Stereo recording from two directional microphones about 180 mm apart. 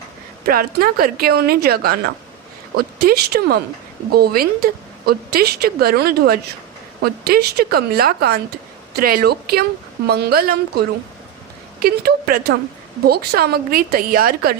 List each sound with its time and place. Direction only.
0.4 s a woman's voice: 55° right (ahead or behind)